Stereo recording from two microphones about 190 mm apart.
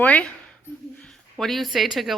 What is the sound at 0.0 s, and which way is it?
A woman's voice, 5° left (ahead or behind).